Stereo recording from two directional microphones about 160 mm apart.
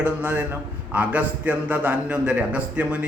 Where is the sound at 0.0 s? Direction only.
10° right (ahead or behind).